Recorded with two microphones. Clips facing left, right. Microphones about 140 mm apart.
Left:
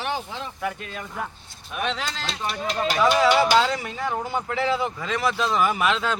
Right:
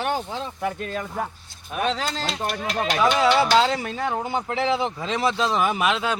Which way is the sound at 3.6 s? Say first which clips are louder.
Right 2 dB; 25° right (ahead or behind).